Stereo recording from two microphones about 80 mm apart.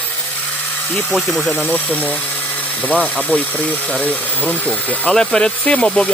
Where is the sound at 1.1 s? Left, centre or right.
Centre.